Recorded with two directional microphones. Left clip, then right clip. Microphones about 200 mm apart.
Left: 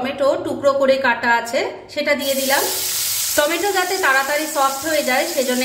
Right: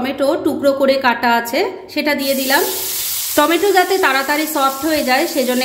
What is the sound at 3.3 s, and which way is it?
A woman's voice, 35° right (ahead or behind).